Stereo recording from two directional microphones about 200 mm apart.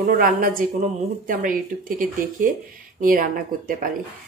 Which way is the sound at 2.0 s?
40° right (ahead or behind).